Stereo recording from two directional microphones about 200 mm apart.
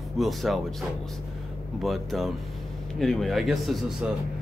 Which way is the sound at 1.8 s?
Centre (ahead or behind).